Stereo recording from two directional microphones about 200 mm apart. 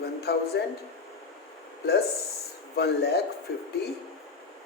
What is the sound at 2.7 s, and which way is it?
Speech, 55° left (ahead or behind).